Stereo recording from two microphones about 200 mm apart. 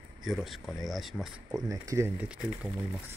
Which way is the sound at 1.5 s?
15° right (ahead or behind).